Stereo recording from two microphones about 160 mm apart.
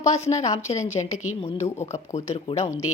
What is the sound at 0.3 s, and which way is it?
A woman's voice, 45° left (ahead or behind).